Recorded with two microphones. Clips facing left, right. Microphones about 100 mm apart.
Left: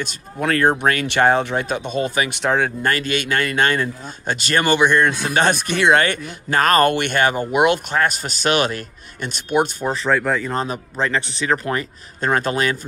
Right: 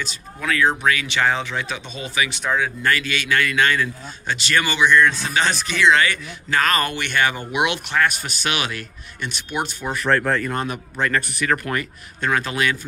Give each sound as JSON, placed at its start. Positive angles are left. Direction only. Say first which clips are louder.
{"t": 0.0, "sound": "a man's voice", "louder": "left 5 dB", "side_deg": 50}
{"t": 2.8, "sound": "a man's voice", "louder": "left 2 dB", "side_deg": 45}
{"t": 10.0, "sound": "speech", "louder": "even", "side_deg": 5}
{"t": 10.4, "sound": "speech", "louder": "left 2 dB", "side_deg": 25}
{"t": 12.3, "sound": "speech", "louder": "left 3 dB", "side_deg": 40}